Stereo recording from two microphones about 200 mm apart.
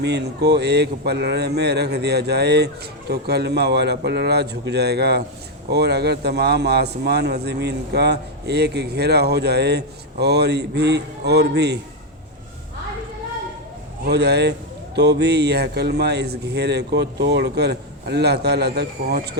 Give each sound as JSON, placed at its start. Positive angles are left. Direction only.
{"t": 0.0, "sound": "speech", "side_deg": -55}
{"t": 14.0, "sound": "speech", "side_deg": -55}